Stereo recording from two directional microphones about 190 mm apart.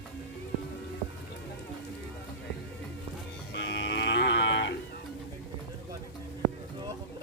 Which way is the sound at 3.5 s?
65° left (ahead or behind).